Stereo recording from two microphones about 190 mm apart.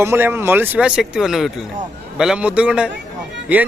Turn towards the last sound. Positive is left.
turn(degrees=-10)  # may be behind; listen again after turning